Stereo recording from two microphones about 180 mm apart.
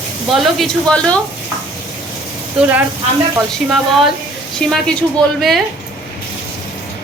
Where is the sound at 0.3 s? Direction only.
Centre (ahead or behind).